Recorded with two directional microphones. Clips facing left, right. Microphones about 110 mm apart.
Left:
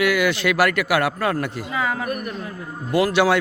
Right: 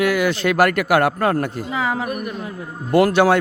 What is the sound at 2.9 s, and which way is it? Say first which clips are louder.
Speech: right 4 dB; 50° right (ahead or behind).